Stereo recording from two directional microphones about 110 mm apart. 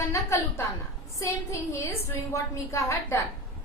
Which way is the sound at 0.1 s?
25° left (ahead or behind).